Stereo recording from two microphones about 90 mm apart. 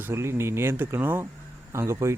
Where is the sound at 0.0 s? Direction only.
30° right (ahead or behind).